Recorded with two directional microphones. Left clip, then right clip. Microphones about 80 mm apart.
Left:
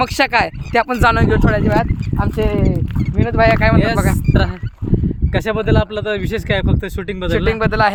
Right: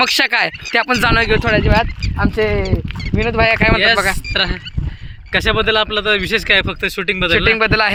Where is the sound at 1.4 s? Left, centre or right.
Right.